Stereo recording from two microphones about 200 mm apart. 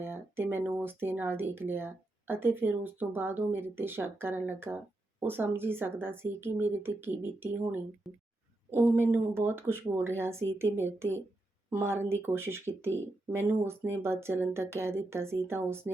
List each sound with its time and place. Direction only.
0.0 s speech: 10° right (ahead or behind)
8.1 s speech: centre (ahead or behind)
8.7 s speech: 10° right (ahead or behind)